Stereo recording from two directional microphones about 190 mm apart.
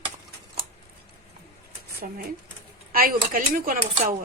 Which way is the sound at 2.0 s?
50° right (ahead or behind).